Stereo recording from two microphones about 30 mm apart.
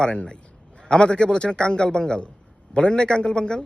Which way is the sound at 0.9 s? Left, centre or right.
Left.